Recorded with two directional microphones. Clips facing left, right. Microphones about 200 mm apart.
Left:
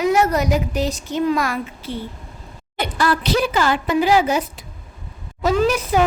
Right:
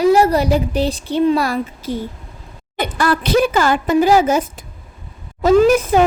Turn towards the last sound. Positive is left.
turn(degrees=-50)  # may be behind; listen again after turning